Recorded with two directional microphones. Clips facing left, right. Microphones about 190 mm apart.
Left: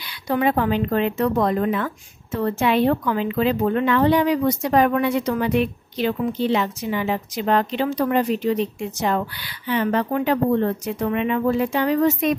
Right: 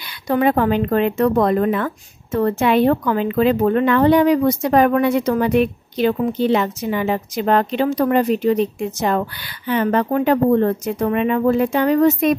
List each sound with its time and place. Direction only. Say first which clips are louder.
0.3 s speech: right 4 dB; 50° right (ahead or behind)